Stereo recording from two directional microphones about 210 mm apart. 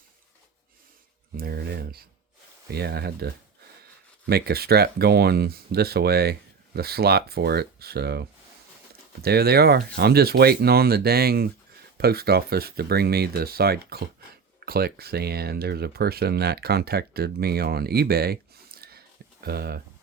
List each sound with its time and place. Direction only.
1.4 s speech: 50° right (ahead or behind)
4.3 s speech: 50° right (ahead or behind)
9.2 s speech: 50° right (ahead or behind)